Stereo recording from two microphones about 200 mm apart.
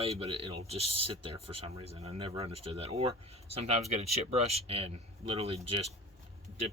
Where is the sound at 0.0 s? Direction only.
30° right (ahead or behind).